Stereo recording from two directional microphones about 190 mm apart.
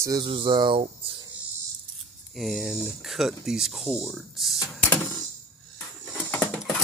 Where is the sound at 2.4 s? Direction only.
Centre (ahead or behind).